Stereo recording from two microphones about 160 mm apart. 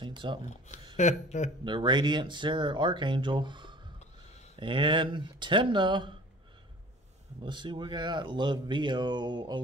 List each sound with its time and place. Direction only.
0.0 s speech: 30° right (ahead or behind)
0.9 s speech: 50° left (ahead or behind)
1.6 s speech: 30° right (ahead or behind)
7.4 s speech: 30° right (ahead or behind)